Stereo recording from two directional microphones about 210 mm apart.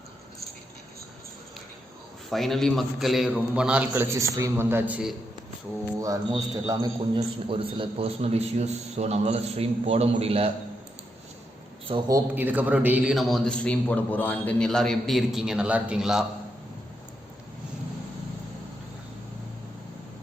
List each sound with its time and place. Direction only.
2.3 s a man's voice: centre (ahead or behind)
6.0 s a man's voice: 15° right (ahead or behind)
11.9 s a man's voice: 20° right (ahead or behind); by 16.2 s 5° right (ahead or behind)